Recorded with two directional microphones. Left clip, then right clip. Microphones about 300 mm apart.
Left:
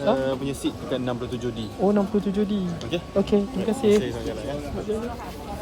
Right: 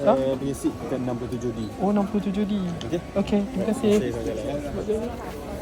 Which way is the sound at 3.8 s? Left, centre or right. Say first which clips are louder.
Left 2 dB; centre.